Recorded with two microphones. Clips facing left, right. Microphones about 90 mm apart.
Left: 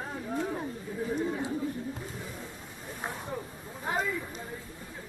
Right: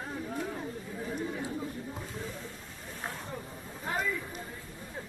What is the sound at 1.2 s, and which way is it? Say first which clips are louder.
Chatter: left 3 dB; 25° left (ahead or behind).